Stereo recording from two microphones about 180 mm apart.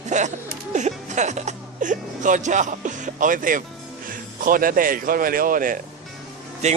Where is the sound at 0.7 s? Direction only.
40° right (ahead or behind).